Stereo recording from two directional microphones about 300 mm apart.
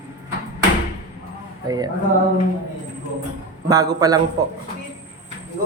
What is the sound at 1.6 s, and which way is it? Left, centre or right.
Speech, centre.